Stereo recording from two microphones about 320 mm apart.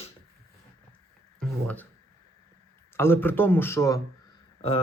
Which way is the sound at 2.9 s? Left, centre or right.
Centre.